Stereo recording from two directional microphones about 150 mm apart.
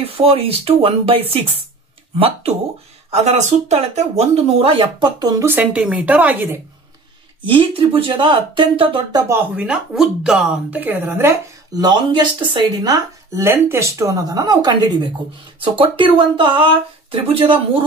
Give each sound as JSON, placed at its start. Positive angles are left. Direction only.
{"t": 0.0, "sound": "speech", "side_deg": -40}
{"t": 5.4, "sound": "speech", "side_deg": -15}
{"t": 7.4, "sound": "speech", "side_deg": -35}
{"t": 9.3, "sound": "speech", "side_deg": -10}